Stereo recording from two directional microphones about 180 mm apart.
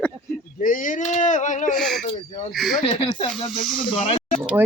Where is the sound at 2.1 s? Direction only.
30° left (ahead or behind).